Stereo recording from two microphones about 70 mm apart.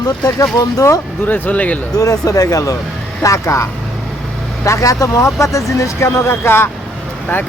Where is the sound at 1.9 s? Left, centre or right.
Left.